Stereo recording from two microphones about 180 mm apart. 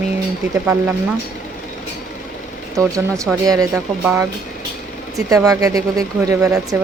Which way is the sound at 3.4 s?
20° right (ahead or behind).